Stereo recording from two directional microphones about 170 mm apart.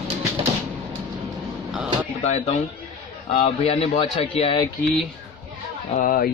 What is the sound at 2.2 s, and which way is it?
Speech, 40° left (ahead or behind).